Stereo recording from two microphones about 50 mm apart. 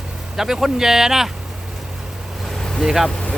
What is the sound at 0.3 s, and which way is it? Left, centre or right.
Speech, centre.